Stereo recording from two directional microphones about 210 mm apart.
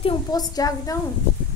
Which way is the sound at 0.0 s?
20° left (ahead or behind).